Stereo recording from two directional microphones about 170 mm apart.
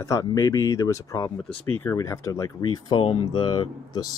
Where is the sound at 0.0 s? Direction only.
20° left (ahead or behind).